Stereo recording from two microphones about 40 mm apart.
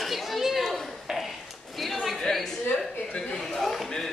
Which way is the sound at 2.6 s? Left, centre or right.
Left.